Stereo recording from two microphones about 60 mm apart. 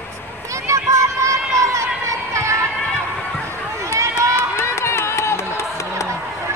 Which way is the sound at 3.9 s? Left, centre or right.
Right.